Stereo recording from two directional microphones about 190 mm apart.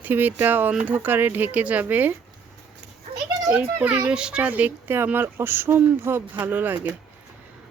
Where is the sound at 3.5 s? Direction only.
10° right (ahead or behind).